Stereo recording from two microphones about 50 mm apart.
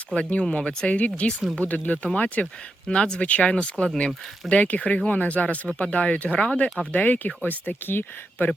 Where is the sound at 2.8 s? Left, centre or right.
Centre.